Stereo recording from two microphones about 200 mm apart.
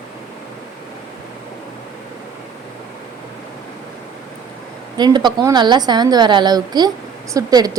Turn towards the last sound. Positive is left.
turn(degrees=-20)  # may be behind; listen again after turning